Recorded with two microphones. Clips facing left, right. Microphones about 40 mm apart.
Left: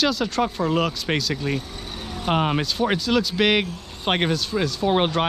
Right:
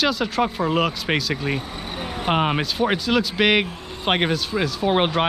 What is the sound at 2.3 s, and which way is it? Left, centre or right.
Speech, centre.